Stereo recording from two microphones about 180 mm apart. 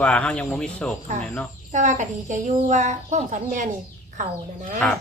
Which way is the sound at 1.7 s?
45° right (ahead or behind).